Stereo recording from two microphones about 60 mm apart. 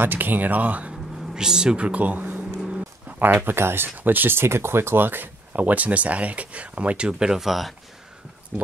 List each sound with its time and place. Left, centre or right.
0.0 s speech: right
1.3 s speech: centre